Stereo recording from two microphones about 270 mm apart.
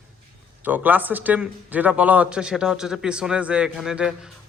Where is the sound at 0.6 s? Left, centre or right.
Centre.